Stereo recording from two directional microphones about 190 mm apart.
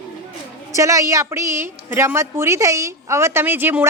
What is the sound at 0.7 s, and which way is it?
A woman's voice, 15° right (ahead or behind).